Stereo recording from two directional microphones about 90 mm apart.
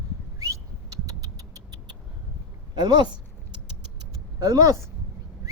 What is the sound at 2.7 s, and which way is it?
Speech, 50° right (ahead or behind).